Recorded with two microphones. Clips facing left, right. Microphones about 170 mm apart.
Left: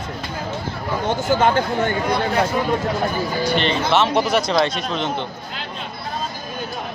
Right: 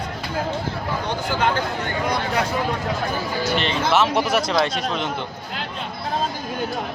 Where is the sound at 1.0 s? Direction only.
45° left (ahead or behind).